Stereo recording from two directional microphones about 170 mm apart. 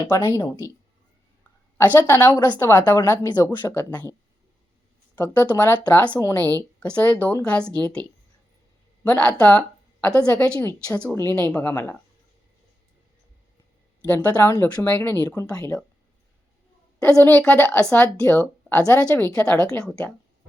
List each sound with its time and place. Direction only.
0.1 s speech: 15° left (ahead or behind)
1.9 s speech: 10° left (ahead or behind)
5.1 s speech: 10° left (ahead or behind)
9.0 s a woman's voice: 5° left (ahead or behind)
14.0 s speech: 10° left (ahead or behind)
17.2 s speech: 10° left (ahead or behind)
19.7 s a woman's voice: 5° left (ahead or behind)